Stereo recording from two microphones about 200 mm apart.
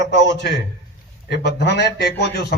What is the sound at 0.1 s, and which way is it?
A man's voice, 60° left (ahead or behind).